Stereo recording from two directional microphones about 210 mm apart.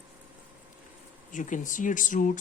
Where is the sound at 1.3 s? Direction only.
35° left (ahead or behind).